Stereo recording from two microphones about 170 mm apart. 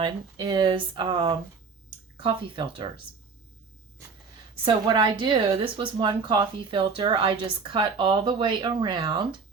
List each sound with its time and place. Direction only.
0.0 s speech: 25° right (ahead or behind)
4.6 s speech: 25° right (ahead or behind)